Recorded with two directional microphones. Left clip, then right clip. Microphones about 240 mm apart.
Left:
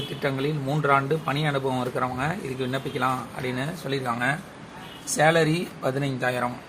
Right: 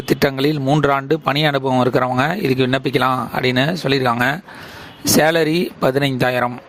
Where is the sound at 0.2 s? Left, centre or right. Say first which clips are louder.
Right 10 dB; right.